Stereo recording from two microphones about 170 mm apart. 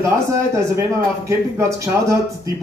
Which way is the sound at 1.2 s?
15° right (ahead or behind).